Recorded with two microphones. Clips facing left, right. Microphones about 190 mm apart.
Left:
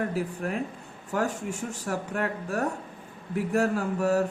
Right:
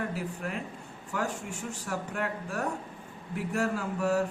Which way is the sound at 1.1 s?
50° left (ahead or behind).